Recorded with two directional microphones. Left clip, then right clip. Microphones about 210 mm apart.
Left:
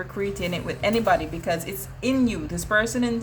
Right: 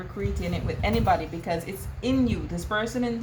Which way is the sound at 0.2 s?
30° left (ahead or behind).